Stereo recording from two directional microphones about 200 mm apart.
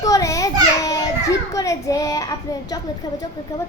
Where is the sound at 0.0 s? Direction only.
15° left (ahead or behind).